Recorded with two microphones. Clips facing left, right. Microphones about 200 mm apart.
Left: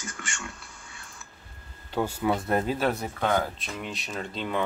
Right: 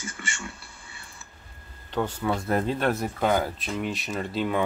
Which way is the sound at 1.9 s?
10° left (ahead or behind).